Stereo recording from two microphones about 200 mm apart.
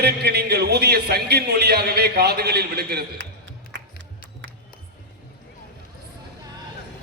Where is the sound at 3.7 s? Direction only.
65° right (ahead or behind).